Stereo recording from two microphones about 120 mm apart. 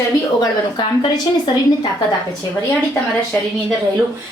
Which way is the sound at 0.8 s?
35° left (ahead or behind).